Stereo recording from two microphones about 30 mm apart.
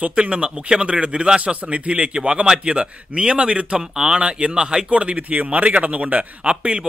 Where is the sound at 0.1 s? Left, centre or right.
Right.